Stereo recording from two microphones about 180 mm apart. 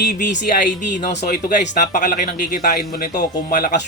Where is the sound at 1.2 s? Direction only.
45° left (ahead or behind).